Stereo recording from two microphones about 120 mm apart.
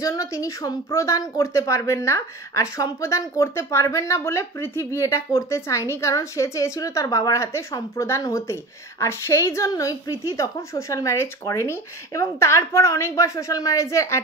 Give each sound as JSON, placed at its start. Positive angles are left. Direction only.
{"t": 0.0, "sound": "speech", "side_deg": 30}